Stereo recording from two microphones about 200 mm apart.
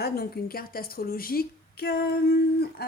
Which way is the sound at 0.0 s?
50° left (ahead or behind).